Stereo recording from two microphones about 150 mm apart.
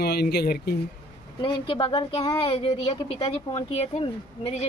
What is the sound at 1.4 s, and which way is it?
Speech, 35° left (ahead or behind).